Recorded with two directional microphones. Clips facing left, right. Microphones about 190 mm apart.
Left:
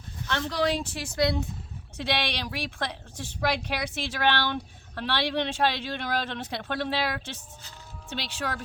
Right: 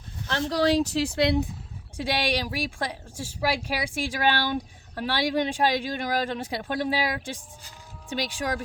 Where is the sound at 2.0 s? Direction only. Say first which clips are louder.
Right 3 dB; 10° right (ahead or behind).